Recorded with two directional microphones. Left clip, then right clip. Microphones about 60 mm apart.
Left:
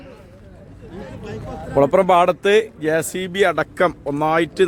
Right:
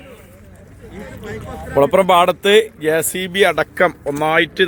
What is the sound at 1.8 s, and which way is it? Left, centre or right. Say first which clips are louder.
Speech: right 2 dB; centre.